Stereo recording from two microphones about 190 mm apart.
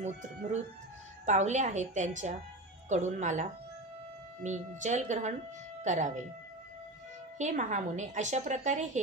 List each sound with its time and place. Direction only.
0.0 s a woman's voice: 35° right (ahead or behind)
7.3 s a woman's voice: 40° right (ahead or behind)